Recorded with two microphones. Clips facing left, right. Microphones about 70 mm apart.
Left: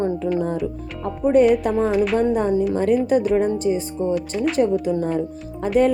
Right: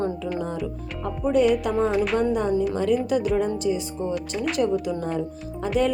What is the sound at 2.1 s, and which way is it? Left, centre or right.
A woman's voice, left.